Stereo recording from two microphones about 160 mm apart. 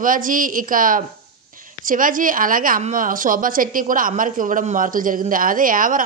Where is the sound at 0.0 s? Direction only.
60° right (ahead or behind).